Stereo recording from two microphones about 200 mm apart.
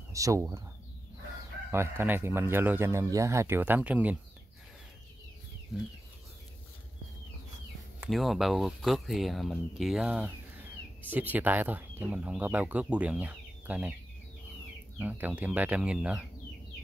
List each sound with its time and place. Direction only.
0.1 s speech: 15° right (ahead or behind)
1.7 s speech: 10° right (ahead or behind)
8.1 s speech: centre (ahead or behind)
15.0 s speech: 10° right (ahead or behind)